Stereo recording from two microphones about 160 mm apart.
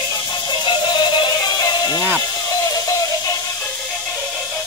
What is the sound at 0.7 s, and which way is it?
Music, 30° left (ahead or behind).